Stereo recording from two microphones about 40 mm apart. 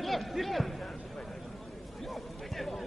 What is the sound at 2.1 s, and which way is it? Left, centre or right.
Music, centre.